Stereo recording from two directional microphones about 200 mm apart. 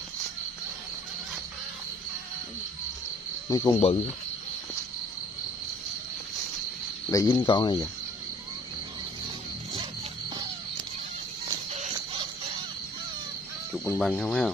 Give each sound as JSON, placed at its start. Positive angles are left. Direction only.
{"t": 3.4, "sound": "speech", "side_deg": 20}
{"t": 7.1, "sound": "speech", "side_deg": 15}
{"t": 11.4, "sound": "music", "side_deg": -35}
{"t": 13.7, "sound": "speech", "side_deg": 5}